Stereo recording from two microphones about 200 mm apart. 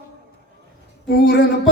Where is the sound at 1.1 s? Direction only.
55° left (ahead or behind).